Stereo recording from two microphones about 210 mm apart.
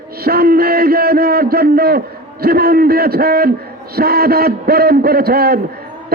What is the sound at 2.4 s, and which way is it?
A man's voice, 45° right (ahead or behind).